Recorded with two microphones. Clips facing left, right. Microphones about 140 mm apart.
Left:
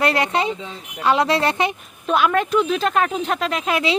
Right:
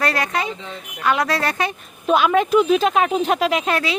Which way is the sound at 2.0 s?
Centre (ahead or behind).